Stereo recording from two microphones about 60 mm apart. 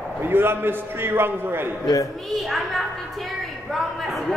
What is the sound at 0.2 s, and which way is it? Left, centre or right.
A man's voice, right.